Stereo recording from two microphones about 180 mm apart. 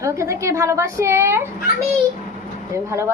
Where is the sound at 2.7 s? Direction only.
15° right (ahead or behind).